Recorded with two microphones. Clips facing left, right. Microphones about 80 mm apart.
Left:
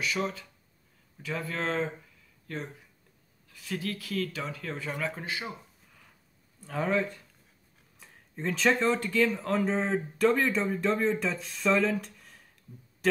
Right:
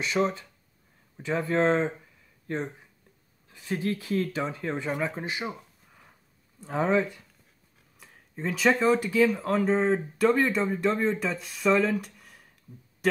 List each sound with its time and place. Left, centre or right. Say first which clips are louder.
0.0 s speech: right 5 dB; right
6.6 s speech: right 4 dB; right
8.0 s speech: right 1 dB; centre